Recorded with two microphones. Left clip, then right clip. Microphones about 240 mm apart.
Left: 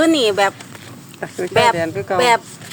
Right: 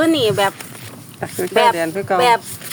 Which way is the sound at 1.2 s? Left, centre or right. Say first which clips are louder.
Even; centre.